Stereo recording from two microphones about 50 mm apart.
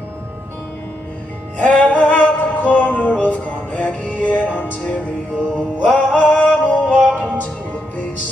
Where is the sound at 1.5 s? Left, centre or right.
Left.